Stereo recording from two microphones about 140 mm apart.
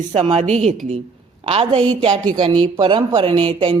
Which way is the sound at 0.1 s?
50° right (ahead or behind).